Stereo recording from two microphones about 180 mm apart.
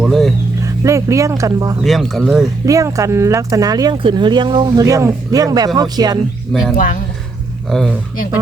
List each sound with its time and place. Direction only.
0.0 s speech: centre (ahead or behind)
0.6 s speech: 15° right (ahead or behind)
1.8 s speech: centre (ahead or behind)
2.6 s speech: 20° right (ahead or behind)
6.5 s speech: centre (ahead or behind)